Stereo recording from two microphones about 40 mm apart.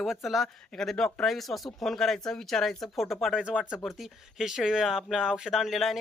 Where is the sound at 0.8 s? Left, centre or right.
Centre.